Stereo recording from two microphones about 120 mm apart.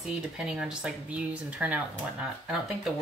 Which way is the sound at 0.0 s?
5° right (ahead or behind).